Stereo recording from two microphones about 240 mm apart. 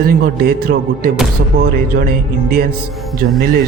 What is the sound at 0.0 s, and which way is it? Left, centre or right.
Speech, right.